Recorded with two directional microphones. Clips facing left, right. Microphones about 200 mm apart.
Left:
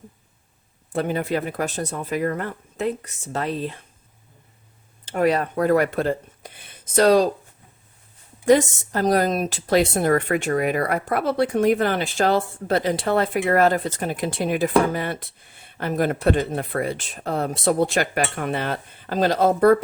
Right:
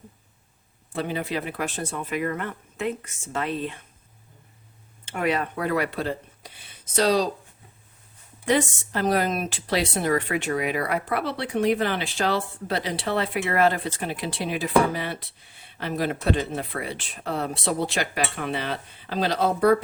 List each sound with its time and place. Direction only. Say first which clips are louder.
0.9 s speech: left 5 dB; 50° left (ahead or behind)
5.0 s speech: left 5 dB; 40° left (ahead or behind)
8.4 s speech: left 6 dB; 45° left (ahead or behind)